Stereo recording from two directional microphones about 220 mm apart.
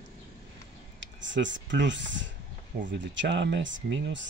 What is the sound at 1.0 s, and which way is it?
Speech, 55° right (ahead or behind).